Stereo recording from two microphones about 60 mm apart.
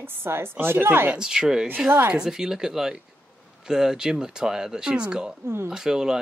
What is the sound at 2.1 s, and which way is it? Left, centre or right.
Speech, centre.